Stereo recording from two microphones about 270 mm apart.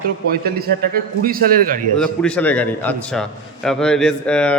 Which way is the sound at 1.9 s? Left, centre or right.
Centre.